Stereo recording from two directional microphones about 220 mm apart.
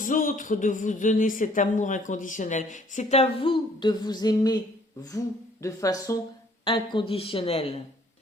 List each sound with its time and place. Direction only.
0.0 s speech: 35° left (ahead or behind); by 4.6 s 20° left (ahead or behind)
5.6 s speech: 15° left (ahead or behind)